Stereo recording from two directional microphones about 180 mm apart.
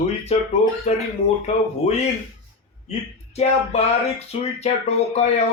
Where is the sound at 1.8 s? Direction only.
35° left (ahead or behind).